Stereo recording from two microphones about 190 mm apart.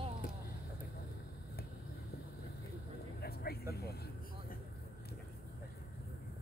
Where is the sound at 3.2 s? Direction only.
55° left (ahead or behind).